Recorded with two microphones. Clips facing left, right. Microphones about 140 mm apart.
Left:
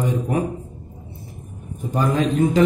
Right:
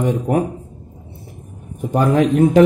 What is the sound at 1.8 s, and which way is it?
Speech, 65° right (ahead or behind).